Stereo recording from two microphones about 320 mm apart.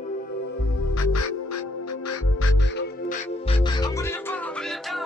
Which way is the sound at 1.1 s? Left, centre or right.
Left.